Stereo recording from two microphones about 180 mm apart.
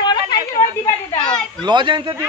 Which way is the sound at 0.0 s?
25° left (ahead or behind).